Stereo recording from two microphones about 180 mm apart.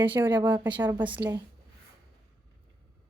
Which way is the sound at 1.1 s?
10° right (ahead or behind).